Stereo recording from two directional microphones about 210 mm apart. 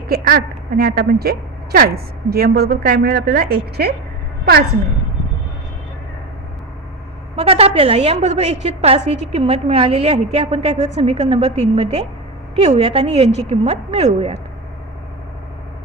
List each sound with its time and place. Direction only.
0.1 s a woman's voice: 50° right (ahead or behind)
7.3 s a woman's voice: 30° right (ahead or behind)